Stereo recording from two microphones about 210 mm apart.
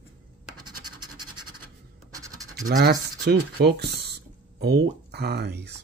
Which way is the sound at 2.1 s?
15° right (ahead or behind).